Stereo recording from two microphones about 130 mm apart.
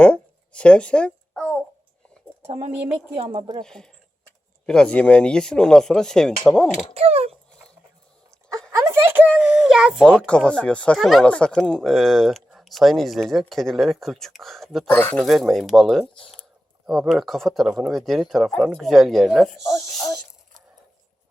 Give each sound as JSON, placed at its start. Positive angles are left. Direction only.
{"t": 0.0, "sound": "a sound", "side_deg": 10}
{"t": 2.4, "sound": "speech", "side_deg": -55}
{"t": 3.6, "sound": "speech", "side_deg": 5}
{"t": 6.9, "sound": "speech", "side_deg": -50}
{"t": 8.7, "sound": "a child's voice", "side_deg": -20}
{"t": 10.2, "sound": "speech", "side_deg": 10}
{"t": 14.8, "sound": "speech", "side_deg": 15}
{"t": 15.2, "sound": "speech", "side_deg": 0}